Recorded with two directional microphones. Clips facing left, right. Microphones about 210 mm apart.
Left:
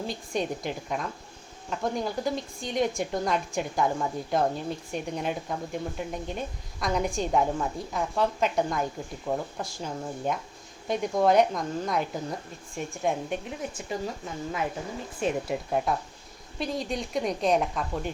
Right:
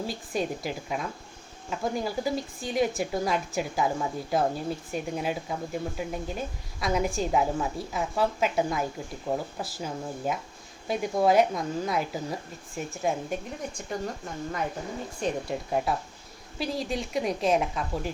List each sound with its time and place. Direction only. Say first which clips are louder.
0.1 s speech: even; 5° right (ahead or behind)